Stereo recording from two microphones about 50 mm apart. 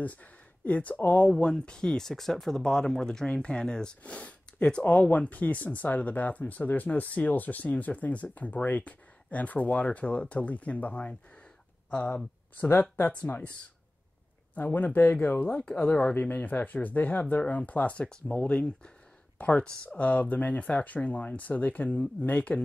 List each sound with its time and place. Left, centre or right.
0.0 s speech: left
1.3 s speech: centre
13.3 s speech: left
14.5 s speech: left